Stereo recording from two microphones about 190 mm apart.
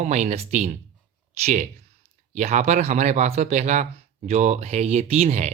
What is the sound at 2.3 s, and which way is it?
Speech, 40° right (ahead or behind).